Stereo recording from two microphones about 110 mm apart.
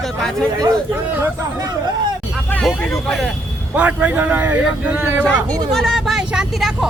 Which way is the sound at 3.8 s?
10° right (ahead or behind).